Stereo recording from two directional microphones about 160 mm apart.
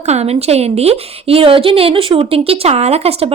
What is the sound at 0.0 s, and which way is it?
A woman's voice, 45° right (ahead or behind).